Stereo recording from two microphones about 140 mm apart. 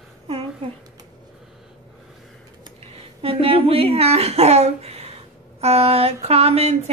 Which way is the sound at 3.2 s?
45° right (ahead or behind).